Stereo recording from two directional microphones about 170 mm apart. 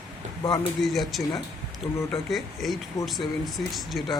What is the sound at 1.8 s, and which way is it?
Speech, 10° left (ahead or behind).